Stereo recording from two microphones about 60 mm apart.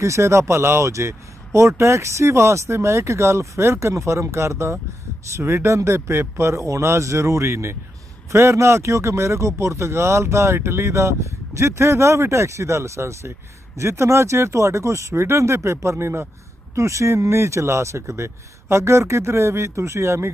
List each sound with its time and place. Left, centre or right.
0.0 s speech: right
5.4 s speech: right
5.7 s speech: right
16.7 s speech: right